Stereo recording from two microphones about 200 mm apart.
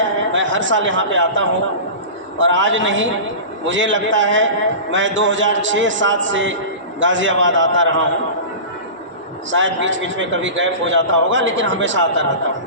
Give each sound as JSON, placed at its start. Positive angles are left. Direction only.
{"t": 0.3, "sound": "a man's voice", "side_deg": -70}
{"t": 9.5, "sound": "a man's voice", "side_deg": -70}